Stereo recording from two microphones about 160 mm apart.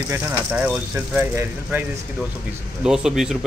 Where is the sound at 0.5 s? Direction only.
10° right (ahead or behind).